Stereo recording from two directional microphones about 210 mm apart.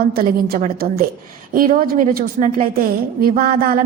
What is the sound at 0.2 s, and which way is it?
A woman's voice, 45° right (ahead or behind).